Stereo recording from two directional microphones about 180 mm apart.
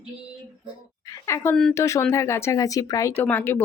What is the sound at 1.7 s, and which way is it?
Speech, 15° left (ahead or behind).